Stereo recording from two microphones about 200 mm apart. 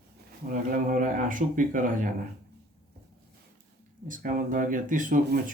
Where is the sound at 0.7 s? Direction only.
45° right (ahead or behind).